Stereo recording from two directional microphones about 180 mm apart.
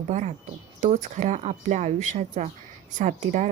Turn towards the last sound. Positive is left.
turn(degrees=-45)  # may be behind; listen again after turning